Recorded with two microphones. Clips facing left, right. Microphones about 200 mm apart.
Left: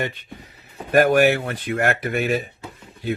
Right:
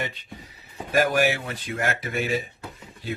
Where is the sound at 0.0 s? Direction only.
55° left (ahead or behind).